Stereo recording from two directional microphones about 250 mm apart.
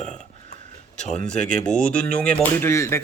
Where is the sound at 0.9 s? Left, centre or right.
Centre.